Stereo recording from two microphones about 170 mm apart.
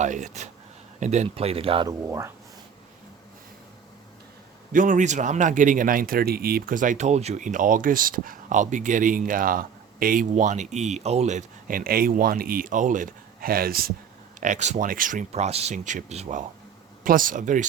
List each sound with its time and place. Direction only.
0.0 s a man's voice: 45° right (ahead or behind)
1.9 s speech: 15° right (ahead or behind)
4.7 s a man's voice: 50° right (ahead or behind)
14.4 s a man's voice: 45° right (ahead or behind)
17.0 s a man's voice: 55° right (ahead or behind)